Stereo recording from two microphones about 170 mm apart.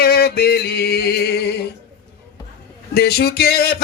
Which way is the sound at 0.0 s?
70° left (ahead or behind).